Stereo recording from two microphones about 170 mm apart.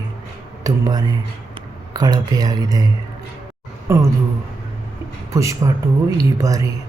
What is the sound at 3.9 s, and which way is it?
Speech, 15° right (ahead or behind).